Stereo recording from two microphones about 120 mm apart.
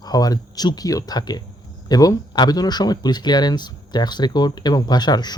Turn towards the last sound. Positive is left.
turn(degrees=35)  # may be behind; listen again after turning